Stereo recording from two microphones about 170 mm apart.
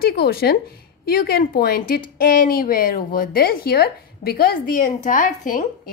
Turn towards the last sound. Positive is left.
turn(degrees=50)  # may be behind; listen again after turning